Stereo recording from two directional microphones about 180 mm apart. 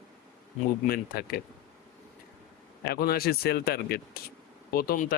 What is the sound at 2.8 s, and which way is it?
Speech, 60° left (ahead or behind).